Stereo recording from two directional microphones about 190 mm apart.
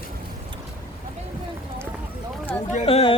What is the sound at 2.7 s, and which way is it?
Speech, 35° left (ahead or behind).